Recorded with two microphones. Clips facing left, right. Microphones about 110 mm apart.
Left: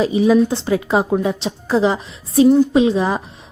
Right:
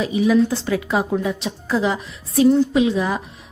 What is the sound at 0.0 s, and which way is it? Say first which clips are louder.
A woman's voice: left 3 dB; 30° left (ahead or behind).